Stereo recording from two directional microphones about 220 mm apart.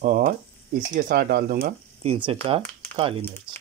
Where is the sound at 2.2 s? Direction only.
25° right (ahead or behind).